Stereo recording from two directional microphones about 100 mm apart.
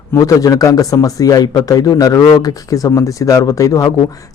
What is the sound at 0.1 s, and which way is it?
Speech, 35° left (ahead or behind).